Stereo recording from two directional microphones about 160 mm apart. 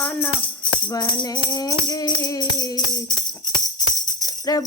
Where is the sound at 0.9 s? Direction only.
25° left (ahead or behind).